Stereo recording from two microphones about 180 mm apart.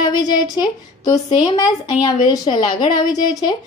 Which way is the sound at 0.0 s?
20° left (ahead or behind).